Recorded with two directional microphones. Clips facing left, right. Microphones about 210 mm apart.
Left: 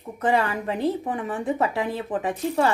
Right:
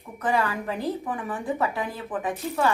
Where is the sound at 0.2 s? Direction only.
25° left (ahead or behind).